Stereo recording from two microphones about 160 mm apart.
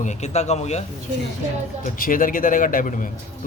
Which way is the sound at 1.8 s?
60° left (ahead or behind).